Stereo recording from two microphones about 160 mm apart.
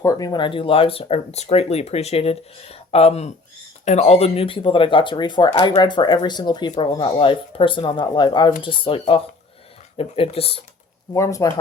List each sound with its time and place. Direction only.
0.0 s speech: 20° left (ahead or behind); by 10.6 s 35° left (ahead or behind)
11.1 s speech: 20° left (ahead or behind)